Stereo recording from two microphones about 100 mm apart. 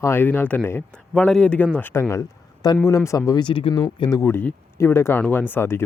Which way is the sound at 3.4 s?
60° left (ahead or behind).